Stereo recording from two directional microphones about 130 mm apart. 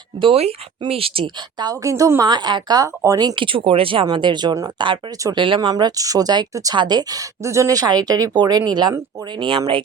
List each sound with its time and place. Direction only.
0.2 s speech: 45° right (ahead or behind)
1.6 s speech: 25° right (ahead or behind); by 9.8 s 40° right (ahead or behind)